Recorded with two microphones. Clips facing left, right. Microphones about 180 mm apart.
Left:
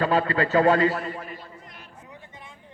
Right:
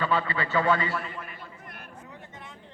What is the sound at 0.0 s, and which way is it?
A man's voice, 40° left (ahead or behind).